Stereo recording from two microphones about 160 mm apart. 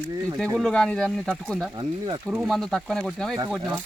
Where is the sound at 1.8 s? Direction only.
25° right (ahead or behind).